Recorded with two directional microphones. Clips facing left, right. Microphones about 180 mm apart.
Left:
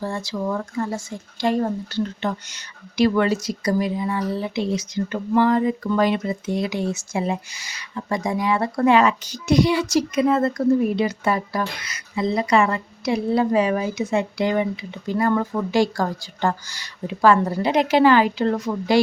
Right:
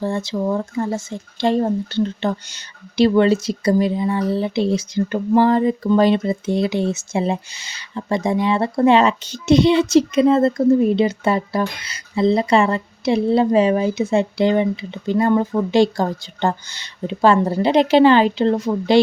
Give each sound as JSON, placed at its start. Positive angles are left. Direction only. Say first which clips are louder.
{"t": 0.0, "sound": "speech", "louder": "right 5 dB", "side_deg": -25}